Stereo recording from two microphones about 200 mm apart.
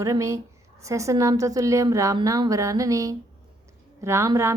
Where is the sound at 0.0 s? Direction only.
15° right (ahead or behind).